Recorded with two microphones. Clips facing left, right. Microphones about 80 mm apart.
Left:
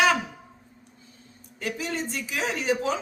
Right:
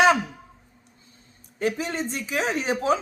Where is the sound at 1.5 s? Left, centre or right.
Right.